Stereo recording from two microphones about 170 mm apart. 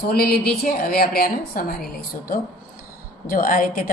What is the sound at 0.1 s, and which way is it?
A woman's voice, 65° left (ahead or behind).